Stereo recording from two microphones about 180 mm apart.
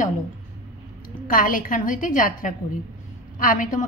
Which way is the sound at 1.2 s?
50° left (ahead or behind).